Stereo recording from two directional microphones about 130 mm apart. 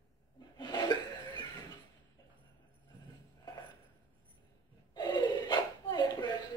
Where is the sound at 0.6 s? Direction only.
35° left (ahead or behind).